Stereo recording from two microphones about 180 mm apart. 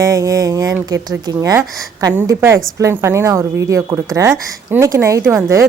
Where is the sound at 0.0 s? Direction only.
20° right (ahead or behind).